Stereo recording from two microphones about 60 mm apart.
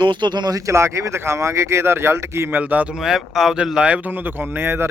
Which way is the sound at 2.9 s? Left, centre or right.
Centre.